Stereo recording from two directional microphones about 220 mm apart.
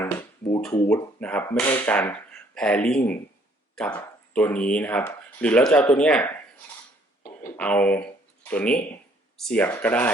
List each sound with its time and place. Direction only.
0.0 s a sound: 10° left (ahead or behind)
0.6 s speech: 5° left (ahead or behind)
7.4 s speech: 5° left (ahead or behind)